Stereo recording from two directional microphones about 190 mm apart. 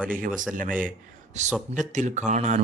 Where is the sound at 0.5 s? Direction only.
45° right (ahead or behind).